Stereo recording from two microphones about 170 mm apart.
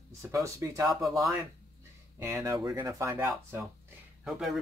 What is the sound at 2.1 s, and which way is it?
Speech, 15° right (ahead or behind).